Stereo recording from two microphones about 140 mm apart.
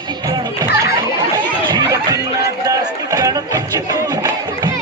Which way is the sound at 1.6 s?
30° right (ahead or behind).